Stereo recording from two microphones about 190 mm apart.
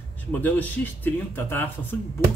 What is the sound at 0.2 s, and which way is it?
Speech, 10° left (ahead or behind).